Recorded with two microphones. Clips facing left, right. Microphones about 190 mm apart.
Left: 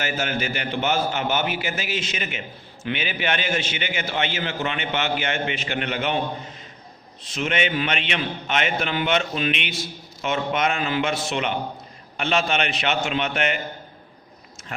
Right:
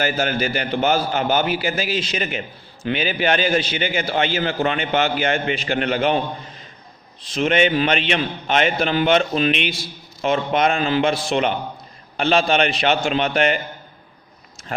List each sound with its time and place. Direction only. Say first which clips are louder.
0.0 s a man's voice: right 5 dB; 35° right (ahead or behind)
7.2 s a man's voice: right 7 dB; 35° right (ahead or behind)